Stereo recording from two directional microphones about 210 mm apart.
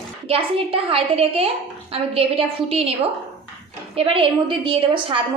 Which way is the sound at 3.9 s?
25° right (ahead or behind).